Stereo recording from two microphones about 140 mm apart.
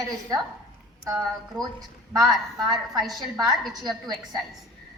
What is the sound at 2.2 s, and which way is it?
Speech, centre (ahead or behind).